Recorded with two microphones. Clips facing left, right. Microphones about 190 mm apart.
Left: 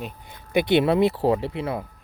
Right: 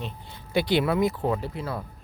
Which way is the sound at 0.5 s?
25° left (ahead or behind).